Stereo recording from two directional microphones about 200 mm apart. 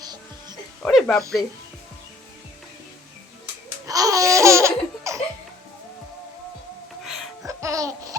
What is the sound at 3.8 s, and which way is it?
Laughter, 15° right (ahead or behind).